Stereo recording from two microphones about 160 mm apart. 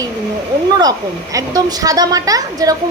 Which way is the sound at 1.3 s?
25° right (ahead or behind).